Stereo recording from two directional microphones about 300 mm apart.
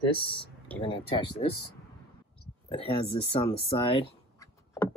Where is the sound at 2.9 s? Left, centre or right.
Centre.